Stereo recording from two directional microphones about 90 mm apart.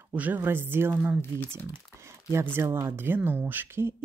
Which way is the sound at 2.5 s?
30° right (ahead or behind).